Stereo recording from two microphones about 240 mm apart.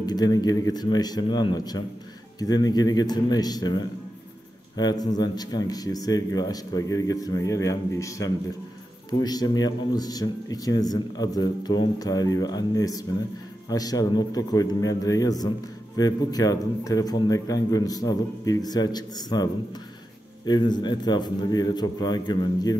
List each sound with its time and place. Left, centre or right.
0.0 s a man's voice: centre